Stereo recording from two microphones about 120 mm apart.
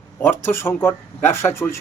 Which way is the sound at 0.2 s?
20° left (ahead or behind).